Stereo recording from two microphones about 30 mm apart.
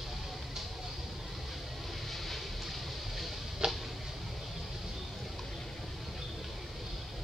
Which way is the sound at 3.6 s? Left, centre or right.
Right.